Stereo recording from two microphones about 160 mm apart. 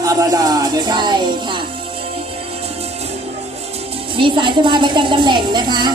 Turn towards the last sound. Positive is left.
turn(degrees=-25)  # may be behind; listen again after turning